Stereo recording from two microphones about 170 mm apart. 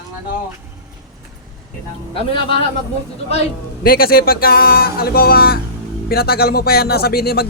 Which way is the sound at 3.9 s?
60° left (ahead or behind).